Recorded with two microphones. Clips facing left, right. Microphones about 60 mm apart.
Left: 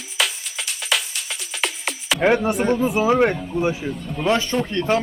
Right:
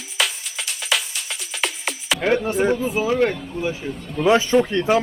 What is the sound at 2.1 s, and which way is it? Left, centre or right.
Speech, centre.